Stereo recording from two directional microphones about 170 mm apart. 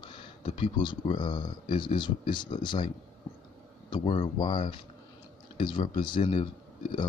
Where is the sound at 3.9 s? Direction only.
30° left (ahead or behind).